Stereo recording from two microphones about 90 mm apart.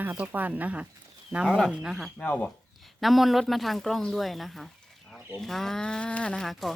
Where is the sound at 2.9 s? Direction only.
Centre (ahead or behind).